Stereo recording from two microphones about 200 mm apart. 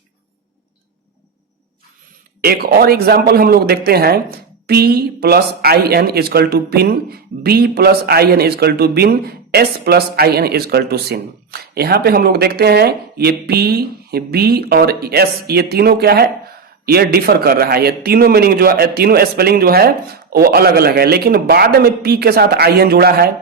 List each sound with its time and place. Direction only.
2.4 s speech: 50° right (ahead or behind)